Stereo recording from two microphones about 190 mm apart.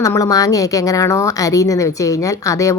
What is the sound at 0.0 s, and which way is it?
A woman's voice, 15° left (ahead or behind).